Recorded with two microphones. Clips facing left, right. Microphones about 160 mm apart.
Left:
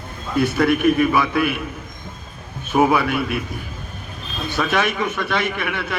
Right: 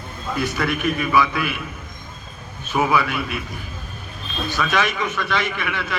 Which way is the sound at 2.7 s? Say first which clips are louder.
Left 3 dB; 50° left (ahead or behind).